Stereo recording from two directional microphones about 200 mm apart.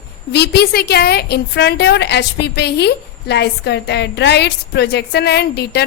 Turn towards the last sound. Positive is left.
turn(degrees=55)  # may be behind; listen again after turning